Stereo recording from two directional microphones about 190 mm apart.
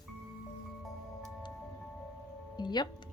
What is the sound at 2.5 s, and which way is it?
Music, 25° left (ahead or behind).